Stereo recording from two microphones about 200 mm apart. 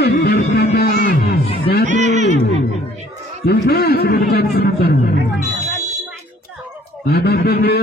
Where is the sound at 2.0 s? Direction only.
35° right (ahead or behind).